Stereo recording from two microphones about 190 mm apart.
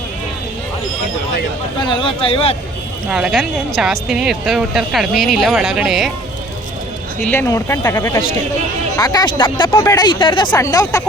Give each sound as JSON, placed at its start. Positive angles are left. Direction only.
{"t": 1.8, "sound": "speech", "side_deg": 25}
{"t": 3.1, "sound": "speech", "side_deg": -5}
{"t": 7.3, "sound": "speech", "side_deg": 15}